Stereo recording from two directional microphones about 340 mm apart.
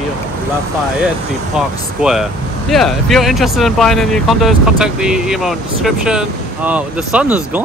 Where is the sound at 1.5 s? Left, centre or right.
Centre.